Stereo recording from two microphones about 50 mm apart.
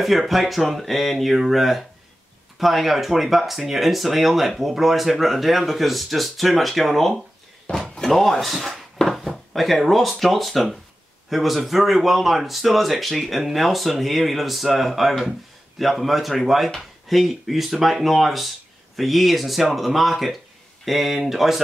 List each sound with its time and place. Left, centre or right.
0.0 s speech: centre
7.8 s door: centre
8.1 s speech: centre